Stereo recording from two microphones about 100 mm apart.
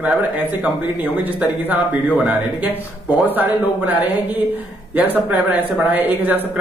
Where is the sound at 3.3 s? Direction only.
20° right (ahead or behind).